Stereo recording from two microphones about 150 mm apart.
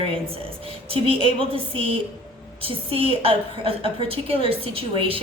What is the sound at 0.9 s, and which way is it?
A woman's voice, 40° right (ahead or behind).